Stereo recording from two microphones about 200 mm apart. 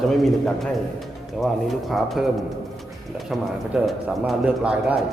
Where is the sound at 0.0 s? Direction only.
Centre (ahead or behind).